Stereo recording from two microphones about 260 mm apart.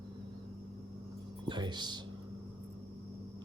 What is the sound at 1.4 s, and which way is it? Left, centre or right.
Music, centre.